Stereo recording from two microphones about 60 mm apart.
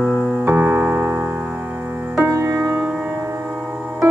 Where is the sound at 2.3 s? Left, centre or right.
Right.